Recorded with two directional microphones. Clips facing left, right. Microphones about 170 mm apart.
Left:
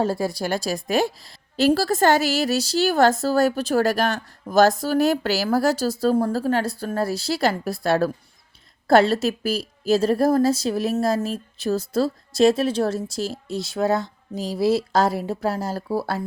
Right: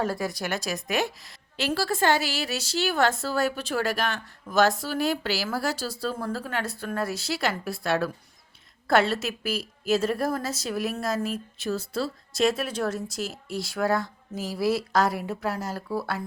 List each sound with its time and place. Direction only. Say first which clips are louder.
0.0 s a woman's voice: left 5 dB; 30° left (ahead or behind)